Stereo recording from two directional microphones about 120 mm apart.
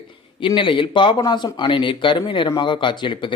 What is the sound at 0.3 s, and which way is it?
A man's voice, 45° left (ahead or behind).